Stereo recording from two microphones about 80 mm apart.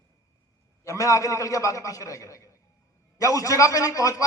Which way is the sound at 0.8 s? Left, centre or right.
Left.